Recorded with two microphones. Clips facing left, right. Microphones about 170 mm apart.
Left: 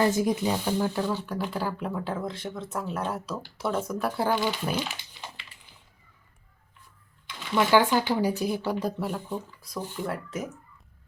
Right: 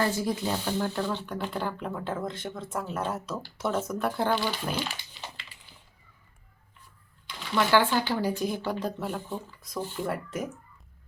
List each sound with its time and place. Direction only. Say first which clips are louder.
0.0 s speech: left 4 dB; 15° left (ahead or behind)
4.3 s speech: left 2 dB; 15° left (ahead or behind)
7.3 s speech: left 2 dB; 15° left (ahead or behind)